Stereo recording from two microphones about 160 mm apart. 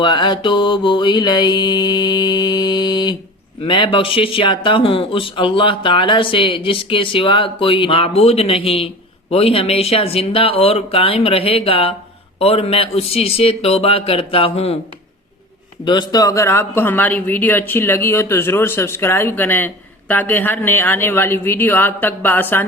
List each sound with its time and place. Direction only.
0.0 s mantra: 30° left (ahead or behind)
3.6 s speech: 30° left (ahead or behind)
15.8 s speech: 30° left (ahead or behind); by 22.6 s 10° left (ahead or behind)